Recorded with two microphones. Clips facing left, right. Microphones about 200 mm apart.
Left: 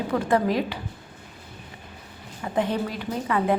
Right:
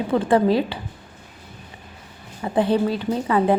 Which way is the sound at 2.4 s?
30° right (ahead or behind).